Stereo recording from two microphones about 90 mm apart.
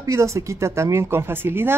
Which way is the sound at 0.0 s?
35° right (ahead or behind).